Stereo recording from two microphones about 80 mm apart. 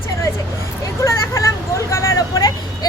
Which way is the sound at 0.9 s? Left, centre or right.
Left.